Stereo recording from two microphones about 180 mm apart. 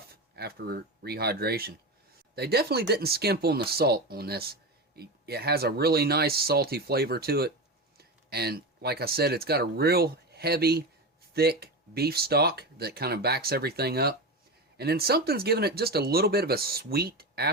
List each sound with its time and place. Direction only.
0.3 s speech: 60° right (ahead or behind)